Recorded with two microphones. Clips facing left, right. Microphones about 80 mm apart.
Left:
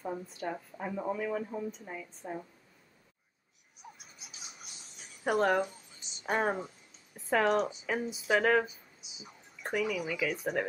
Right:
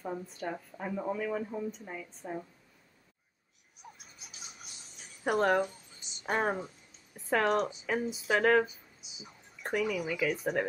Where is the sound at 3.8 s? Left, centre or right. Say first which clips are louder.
Left 1 dB; centre.